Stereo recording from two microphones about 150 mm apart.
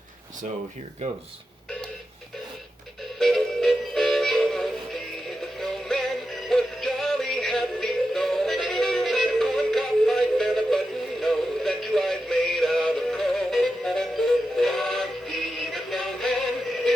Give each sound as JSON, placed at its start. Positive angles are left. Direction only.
{"t": 3.2, "sound": "music", "side_deg": 0}